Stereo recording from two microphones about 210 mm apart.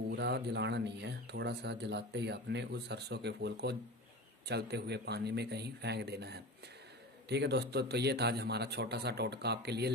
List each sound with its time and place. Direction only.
0.1 s speech: 55° right (ahead or behind)